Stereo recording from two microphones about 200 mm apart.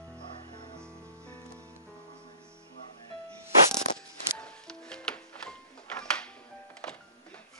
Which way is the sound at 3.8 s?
5° left (ahead or behind).